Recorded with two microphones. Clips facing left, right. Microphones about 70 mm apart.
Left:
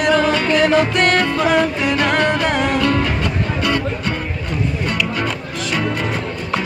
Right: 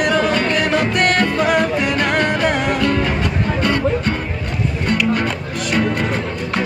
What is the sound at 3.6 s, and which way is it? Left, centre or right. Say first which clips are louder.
Music: right 4 dB; right.